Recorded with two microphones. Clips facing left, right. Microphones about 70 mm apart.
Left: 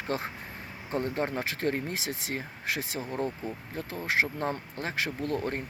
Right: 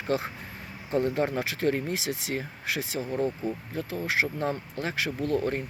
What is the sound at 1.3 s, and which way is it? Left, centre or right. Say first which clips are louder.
Speech: right 3 dB; left.